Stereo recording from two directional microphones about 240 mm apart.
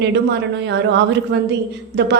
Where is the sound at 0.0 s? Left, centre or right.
Right.